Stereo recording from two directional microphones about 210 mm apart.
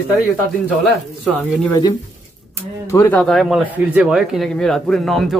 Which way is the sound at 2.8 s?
10° left (ahead or behind).